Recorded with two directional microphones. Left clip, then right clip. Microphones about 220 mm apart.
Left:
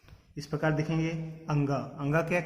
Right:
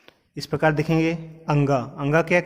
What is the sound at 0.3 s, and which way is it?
A man's voice, 45° right (ahead or behind).